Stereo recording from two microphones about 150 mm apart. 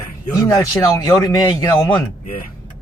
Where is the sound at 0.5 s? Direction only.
20° left (ahead or behind).